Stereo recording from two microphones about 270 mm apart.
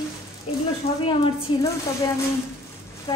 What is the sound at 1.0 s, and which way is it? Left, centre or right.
Speech, centre.